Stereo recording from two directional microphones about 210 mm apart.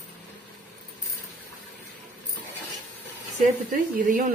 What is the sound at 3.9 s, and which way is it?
Speech, 40° right (ahead or behind).